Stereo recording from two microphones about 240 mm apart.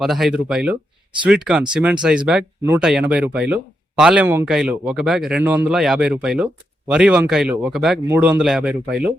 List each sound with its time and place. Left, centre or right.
0.0 s speech: centre